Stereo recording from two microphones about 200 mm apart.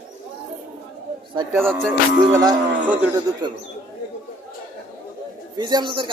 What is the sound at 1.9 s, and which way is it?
Music, 15° right (ahead or behind).